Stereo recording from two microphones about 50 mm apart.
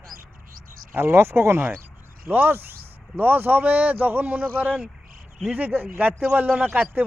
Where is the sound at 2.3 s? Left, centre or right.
Right.